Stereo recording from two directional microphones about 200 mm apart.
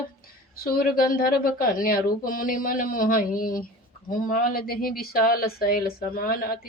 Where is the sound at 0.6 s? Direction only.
50° left (ahead or behind).